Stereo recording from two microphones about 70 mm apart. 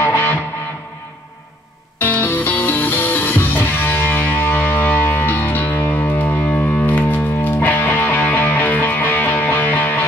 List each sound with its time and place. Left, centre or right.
0.0 s music: left
2.0 s music: left